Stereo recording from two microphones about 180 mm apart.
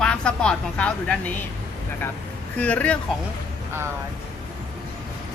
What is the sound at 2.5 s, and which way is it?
Speech, 10° left (ahead or behind).